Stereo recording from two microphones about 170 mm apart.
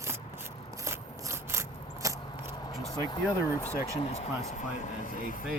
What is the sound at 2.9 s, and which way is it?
Speech, 20° left (ahead or behind).